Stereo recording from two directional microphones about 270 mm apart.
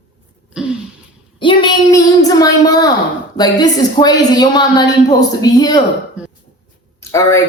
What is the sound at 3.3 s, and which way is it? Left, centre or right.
A man's voice, centre.